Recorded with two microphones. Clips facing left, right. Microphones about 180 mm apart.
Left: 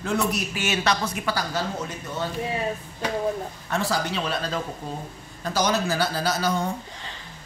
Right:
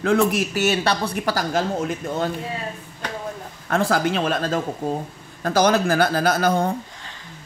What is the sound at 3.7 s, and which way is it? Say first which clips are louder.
Speech: right 6 dB; 50° right (ahead or behind).